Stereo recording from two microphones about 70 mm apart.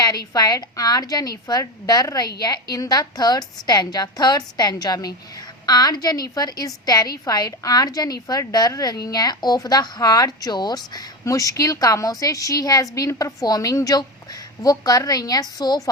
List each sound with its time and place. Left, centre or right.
0.0 s a woman's voice: left
9.6 s speech: left